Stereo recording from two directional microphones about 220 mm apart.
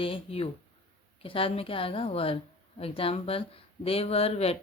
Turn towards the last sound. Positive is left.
turn(degrees=25)  # may be behind; listen again after turning